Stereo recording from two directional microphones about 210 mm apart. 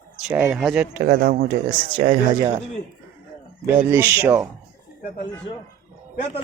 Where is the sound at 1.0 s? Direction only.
45° right (ahead or behind).